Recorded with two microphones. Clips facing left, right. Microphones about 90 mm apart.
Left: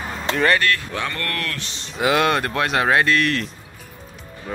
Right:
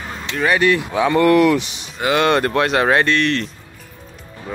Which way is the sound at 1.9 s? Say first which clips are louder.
Right 2 dB; centre (ahead or behind).